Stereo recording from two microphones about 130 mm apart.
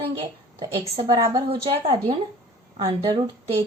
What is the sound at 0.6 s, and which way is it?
Speech, 40° right (ahead or behind).